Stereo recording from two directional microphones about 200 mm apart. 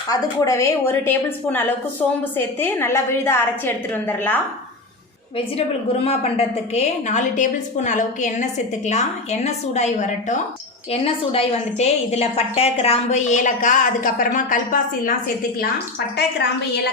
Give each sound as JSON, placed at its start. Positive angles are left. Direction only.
{"t": 0.1, "sound": "a woman's voice", "side_deg": 15}
{"t": 5.5, "sound": "a woman's voice", "side_deg": 30}